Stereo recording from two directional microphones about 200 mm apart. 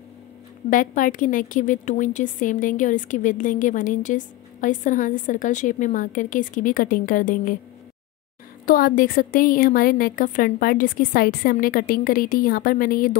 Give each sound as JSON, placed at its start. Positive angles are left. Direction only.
{"t": 0.7, "sound": "a woman's voice", "side_deg": 40}
{"t": 8.6, "sound": "a woman's voice", "side_deg": 45}